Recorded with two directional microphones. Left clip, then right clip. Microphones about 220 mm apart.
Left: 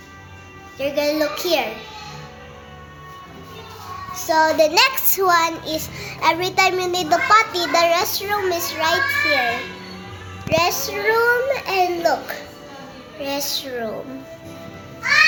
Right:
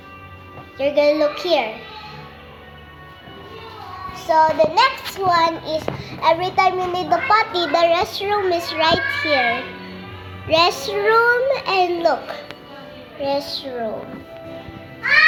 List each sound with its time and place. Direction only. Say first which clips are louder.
0.8 s a child's voice: right 4 dB; centre (ahead or behind)
4.1 s child singing: right 1 dB; 25° left (ahead or behind); by 5.3 s 45° left (ahead or behind)
5.3 s a child's voice: right 2 dB; 25° left (ahead or behind); by 9.4 s 15° right (ahead or behind)
10.5 s a child's voice: right 3 dB; 15° right (ahead or behind)
13.2 s a child's voice: right 2 dB; 10° left (ahead or behind)